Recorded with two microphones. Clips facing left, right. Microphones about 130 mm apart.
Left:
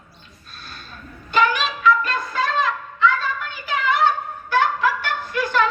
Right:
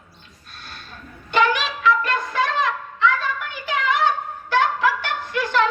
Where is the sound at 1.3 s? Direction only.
80° right.